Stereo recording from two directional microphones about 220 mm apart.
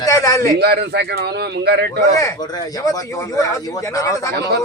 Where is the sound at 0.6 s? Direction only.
50° right (ahead or behind).